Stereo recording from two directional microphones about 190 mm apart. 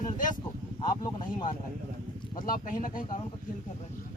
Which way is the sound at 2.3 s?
45° left (ahead or behind).